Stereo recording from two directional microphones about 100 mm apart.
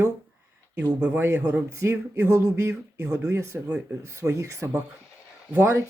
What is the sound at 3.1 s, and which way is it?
Speech, 10° right (ahead or behind).